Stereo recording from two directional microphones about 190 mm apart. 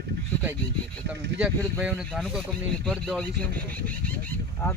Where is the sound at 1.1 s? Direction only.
5° right (ahead or behind).